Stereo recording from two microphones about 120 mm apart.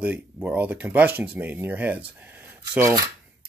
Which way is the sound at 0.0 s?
10° right (ahead or behind).